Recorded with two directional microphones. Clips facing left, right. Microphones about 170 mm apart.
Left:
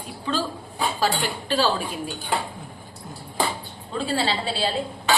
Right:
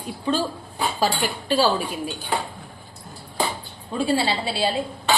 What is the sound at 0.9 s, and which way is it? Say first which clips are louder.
Speech: right 2 dB; 15° right (ahead or behind).